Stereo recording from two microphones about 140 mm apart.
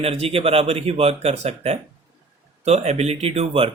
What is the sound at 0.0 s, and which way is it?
Speech, 45° right (ahead or behind).